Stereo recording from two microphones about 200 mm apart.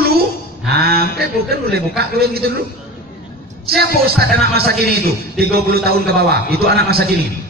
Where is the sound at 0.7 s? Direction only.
50° right (ahead or behind).